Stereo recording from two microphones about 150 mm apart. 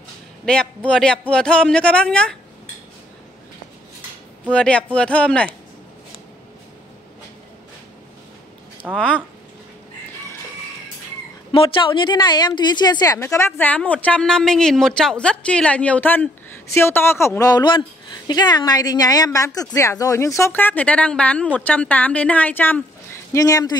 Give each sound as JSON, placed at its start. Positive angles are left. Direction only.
{"t": 0.5, "sound": "speech", "side_deg": 5}
{"t": 4.5, "sound": "a woman's voice", "side_deg": 5}
{"t": 8.9, "sound": "a woman's voice", "side_deg": 5}
{"t": 11.5, "sound": "a woman's voice", "side_deg": 35}
{"t": 13.6, "sound": "a woman's voice", "side_deg": 10}
{"t": 23.3, "sound": "a woman's voice", "side_deg": 25}